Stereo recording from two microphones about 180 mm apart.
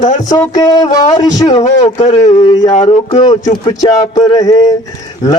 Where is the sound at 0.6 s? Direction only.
20° left (ahead or behind).